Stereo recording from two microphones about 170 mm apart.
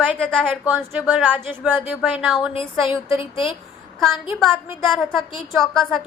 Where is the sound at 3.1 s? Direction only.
30° left (ahead or behind).